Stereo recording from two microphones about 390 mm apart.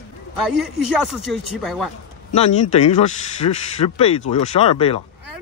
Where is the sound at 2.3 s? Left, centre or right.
Centre.